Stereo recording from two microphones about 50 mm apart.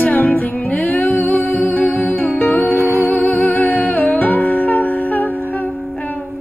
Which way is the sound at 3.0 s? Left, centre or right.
Left.